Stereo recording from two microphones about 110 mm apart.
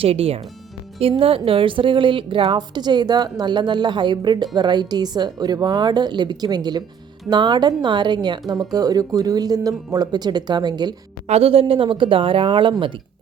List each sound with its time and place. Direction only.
0.0 s a woman's voice: 60° right (ahead or behind); by 10.9 s 40° right (ahead or behind)
11.3 s speech: 65° right (ahead or behind)
11.7 s a woman's voice: 50° right (ahead or behind)